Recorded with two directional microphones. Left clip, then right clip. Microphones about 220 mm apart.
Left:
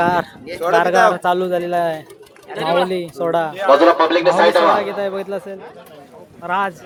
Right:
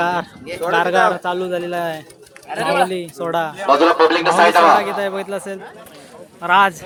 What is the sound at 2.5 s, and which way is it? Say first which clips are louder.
Speech: right 2 dB; 55° right (ahead or behind).